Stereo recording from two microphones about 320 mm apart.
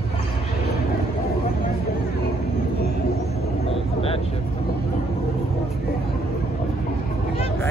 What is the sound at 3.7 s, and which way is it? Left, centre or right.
Vehicle, centre.